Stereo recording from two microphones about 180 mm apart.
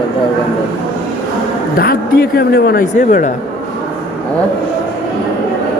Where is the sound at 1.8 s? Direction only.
55° left (ahead or behind).